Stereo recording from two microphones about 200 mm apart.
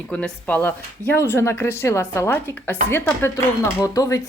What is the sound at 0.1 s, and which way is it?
Speech, 10° left (ahead or behind).